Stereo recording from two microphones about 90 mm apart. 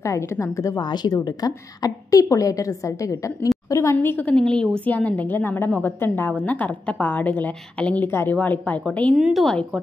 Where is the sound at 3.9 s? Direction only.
20° left (ahead or behind).